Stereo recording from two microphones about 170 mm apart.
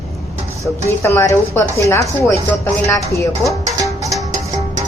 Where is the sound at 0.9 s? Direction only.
15° left (ahead or behind).